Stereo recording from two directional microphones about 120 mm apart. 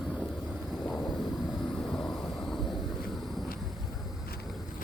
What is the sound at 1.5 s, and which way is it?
Vehicle, 5° left (ahead or behind).